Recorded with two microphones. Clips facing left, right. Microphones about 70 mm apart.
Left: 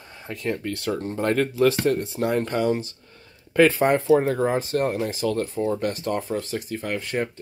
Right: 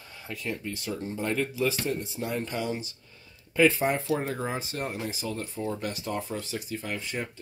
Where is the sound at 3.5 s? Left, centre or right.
Left.